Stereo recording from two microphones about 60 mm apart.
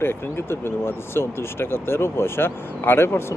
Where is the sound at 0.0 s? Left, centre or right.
Left.